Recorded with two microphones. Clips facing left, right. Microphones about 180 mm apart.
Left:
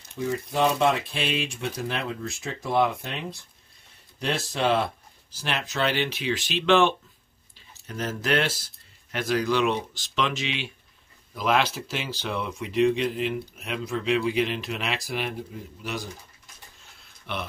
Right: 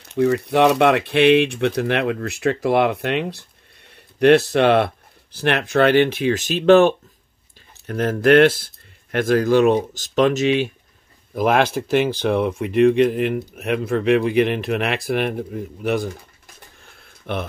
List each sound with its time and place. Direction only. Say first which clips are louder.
0.1 s speech: right 11 dB; 70° right (ahead or behind); by 7.0 s 45° right (ahead or behind)
7.7 s speech: right 9 dB; 60° right (ahead or behind)
16.8 s a sound: right 12 dB; 55° right (ahead or behind)